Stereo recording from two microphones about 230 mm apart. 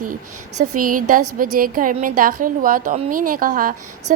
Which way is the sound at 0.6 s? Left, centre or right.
Right.